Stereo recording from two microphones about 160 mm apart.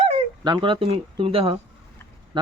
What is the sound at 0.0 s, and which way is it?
Speech, 35° right (ahead or behind).